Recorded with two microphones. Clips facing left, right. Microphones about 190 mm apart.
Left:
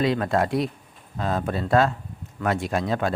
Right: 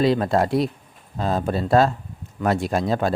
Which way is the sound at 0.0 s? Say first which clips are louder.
Right 3 dB; 35° right (ahead or behind).